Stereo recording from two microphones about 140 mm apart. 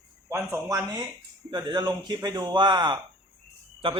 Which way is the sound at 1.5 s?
35° right (ahead or behind).